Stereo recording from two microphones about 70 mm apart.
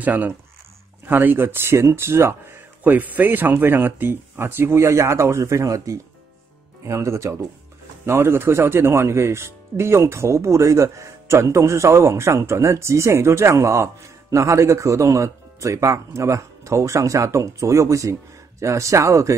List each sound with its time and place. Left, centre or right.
0.0 s speech: right
2.8 s speech: right